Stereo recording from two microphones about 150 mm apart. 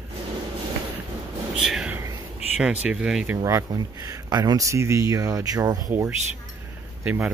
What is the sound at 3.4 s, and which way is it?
Speech, 20° right (ahead or behind).